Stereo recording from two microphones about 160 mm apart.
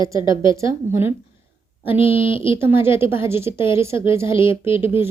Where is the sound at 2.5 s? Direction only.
15° right (ahead or behind).